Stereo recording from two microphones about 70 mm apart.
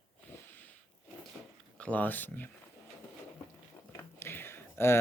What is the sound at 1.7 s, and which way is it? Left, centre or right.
Speech, centre.